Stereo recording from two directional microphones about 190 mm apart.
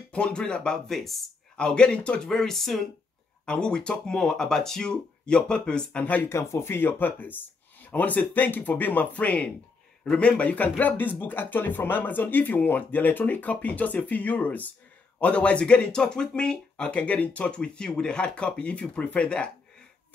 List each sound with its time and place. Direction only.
0.1 s speech: 5° left (ahead or behind)